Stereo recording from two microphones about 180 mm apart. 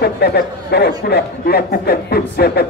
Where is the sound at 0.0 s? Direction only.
60° left (ahead or behind).